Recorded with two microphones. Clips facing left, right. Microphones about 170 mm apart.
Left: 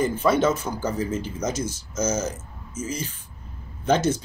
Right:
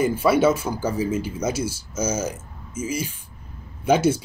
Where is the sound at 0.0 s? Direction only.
10° right (ahead or behind).